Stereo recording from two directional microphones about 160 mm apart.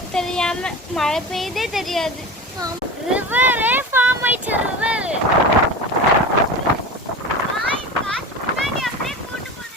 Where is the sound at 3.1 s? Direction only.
10° right (ahead or behind).